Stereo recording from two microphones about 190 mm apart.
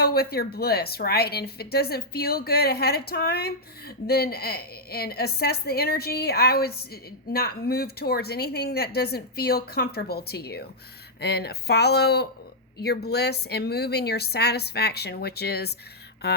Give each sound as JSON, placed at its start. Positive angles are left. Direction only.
{"t": 0.0, "sound": "speech", "side_deg": 55}